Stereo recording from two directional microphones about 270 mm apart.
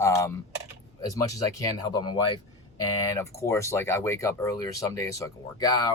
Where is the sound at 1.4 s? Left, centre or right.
Centre.